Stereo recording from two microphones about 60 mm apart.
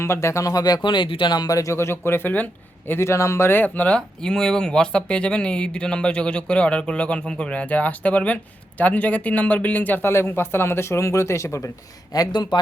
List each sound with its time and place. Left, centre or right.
0.0 s speech: left
0.4 s speech: left
1.5 s speech: left
1.7 s speech: left
3.1 s speech: left
3.6 s speech: left
3.9 s speech: centre; by 11.7 s left
12.1 s speech: left